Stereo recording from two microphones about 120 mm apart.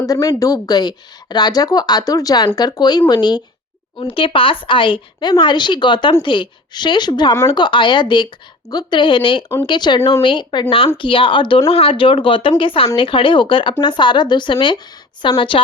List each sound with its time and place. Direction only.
0.0 s a woman's voice: 30° left (ahead or behind); by 15.6 s 45° left (ahead or behind)